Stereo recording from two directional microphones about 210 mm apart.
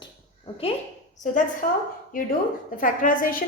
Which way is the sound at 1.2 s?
35° left (ahead or behind).